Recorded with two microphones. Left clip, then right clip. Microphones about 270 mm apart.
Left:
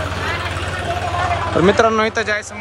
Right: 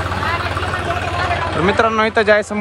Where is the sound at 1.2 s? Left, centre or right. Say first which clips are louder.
Even; right.